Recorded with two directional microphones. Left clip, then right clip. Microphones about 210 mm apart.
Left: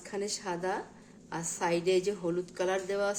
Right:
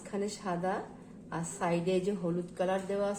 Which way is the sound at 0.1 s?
40° left (ahead or behind).